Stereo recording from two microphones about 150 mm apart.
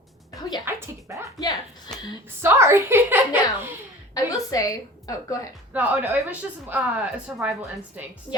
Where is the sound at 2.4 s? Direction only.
15° right (ahead or behind).